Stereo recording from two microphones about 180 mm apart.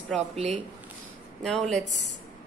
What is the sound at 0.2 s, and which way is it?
Speech, 35° right (ahead or behind).